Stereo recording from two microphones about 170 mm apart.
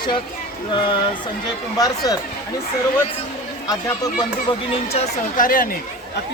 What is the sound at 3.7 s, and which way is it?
Speech, 20° left (ahead or behind).